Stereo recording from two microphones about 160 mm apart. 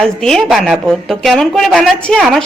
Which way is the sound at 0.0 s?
5° left (ahead or behind).